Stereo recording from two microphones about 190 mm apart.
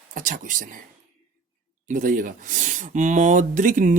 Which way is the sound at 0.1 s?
45° right (ahead or behind).